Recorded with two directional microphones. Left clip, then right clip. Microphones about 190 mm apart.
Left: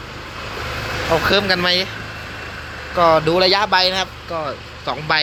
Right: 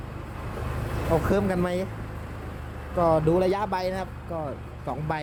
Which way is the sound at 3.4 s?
10° right (ahead or behind).